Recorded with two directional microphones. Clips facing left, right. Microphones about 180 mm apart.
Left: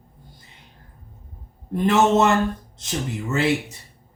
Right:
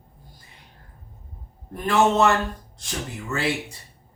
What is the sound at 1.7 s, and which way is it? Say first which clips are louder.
Speech: left 3 dB; 20° left (ahead or behind).